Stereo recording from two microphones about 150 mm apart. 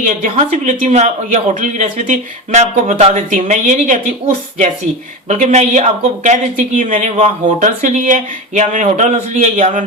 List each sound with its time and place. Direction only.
0.0 s speech: 55° right (ahead or behind)